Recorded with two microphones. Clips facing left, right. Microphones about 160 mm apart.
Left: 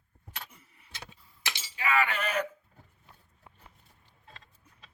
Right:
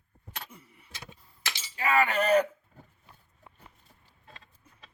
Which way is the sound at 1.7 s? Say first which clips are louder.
Right 4 dB; 40° right (ahead or behind).